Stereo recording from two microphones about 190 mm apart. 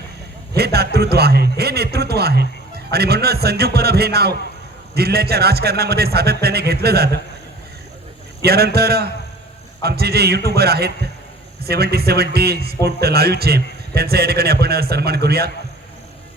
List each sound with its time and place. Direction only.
0.5 s a sound: 55° right (ahead or behind)
0.9 s speech: 55° right (ahead or behind)
8.4 s speech: 55° right (ahead or behind)